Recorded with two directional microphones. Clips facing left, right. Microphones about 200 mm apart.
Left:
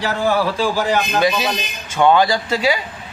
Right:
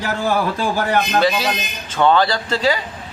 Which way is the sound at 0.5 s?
55° right (ahead or behind).